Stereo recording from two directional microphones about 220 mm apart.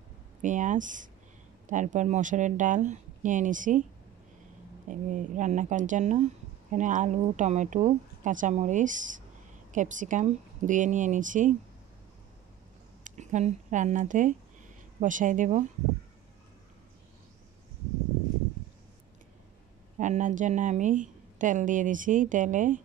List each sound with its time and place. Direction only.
0.4 s a woman's voice: 35° right (ahead or behind)
4.8 s a woman's voice: 35° right (ahead or behind)
13.0 s a woman's voice: 35° right (ahead or behind)
20.0 s a woman's voice: 35° right (ahead or behind)